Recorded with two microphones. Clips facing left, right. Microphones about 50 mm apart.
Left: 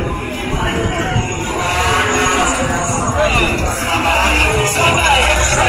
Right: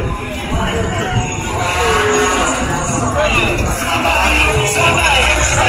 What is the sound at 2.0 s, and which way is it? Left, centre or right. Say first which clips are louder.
Vehicle: right 1 dB; centre.